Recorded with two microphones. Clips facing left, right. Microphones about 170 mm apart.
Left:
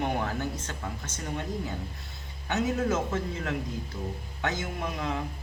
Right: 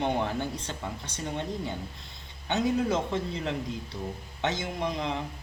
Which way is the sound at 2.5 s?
15° right (ahead or behind).